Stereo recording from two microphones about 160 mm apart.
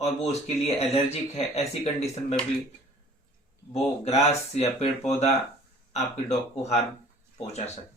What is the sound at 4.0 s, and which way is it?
Speech, 40° left (ahead or behind).